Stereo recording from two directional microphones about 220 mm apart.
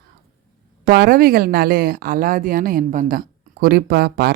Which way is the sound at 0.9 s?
45° right (ahead or behind).